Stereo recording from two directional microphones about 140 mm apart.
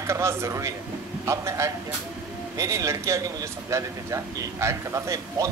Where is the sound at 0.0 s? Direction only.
20° right (ahead or behind).